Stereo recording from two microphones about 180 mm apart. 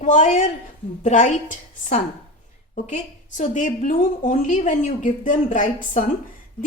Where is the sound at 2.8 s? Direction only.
40° left (ahead or behind).